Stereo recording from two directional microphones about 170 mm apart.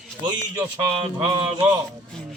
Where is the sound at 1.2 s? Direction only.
30° right (ahead or behind).